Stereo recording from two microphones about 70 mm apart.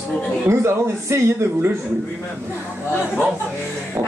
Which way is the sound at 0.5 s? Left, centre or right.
Right.